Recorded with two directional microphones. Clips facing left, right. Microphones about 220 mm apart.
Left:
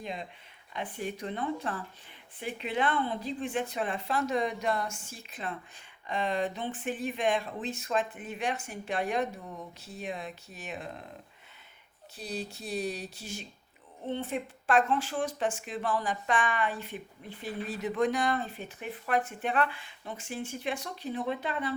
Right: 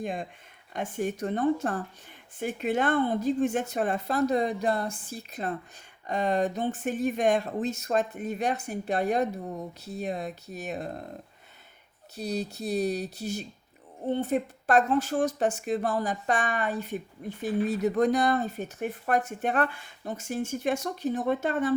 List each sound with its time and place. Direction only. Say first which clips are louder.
0.0 s speech: right 6 dB; 50° right (ahead or behind)
12.1 s speech: right 6 dB; 40° right (ahead or behind)